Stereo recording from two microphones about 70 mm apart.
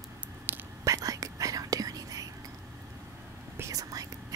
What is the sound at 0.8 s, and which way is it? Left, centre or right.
Whispering, right.